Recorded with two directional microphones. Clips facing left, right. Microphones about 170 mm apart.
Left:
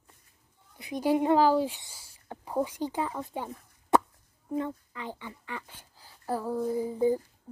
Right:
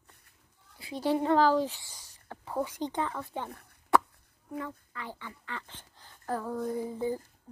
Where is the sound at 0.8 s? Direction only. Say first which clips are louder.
Left 3 dB; 15° left (ahead or behind).